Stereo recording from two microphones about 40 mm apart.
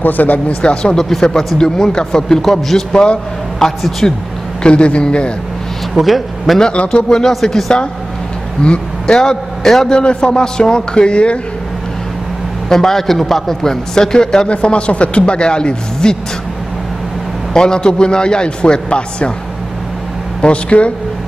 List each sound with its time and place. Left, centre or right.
0.0 s speech: left
0.6 s a man's voice: left
0.9 s a man's voice: centre
1.6 s a man's voice: centre
2.9 s a man's voice: centre
5.9 s speech: centre
6.6 s a man's voice: left
7.1 s a man's voice: centre
9.0 s a man's voice: centre
9.9 s a man's voice: left
12.6 s a man's voice: centre
17.6 s a man's voice: centre
20.4 s speech: left